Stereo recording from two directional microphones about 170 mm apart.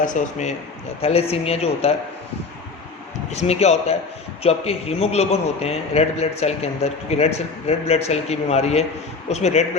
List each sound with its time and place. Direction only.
0.0 s a man's voice: 45° left (ahead or behind)
3.2 s a man's voice: 40° left (ahead or behind)